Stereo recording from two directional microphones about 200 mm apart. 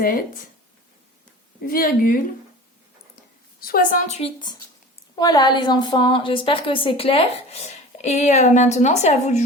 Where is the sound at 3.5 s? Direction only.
45° left (ahead or behind).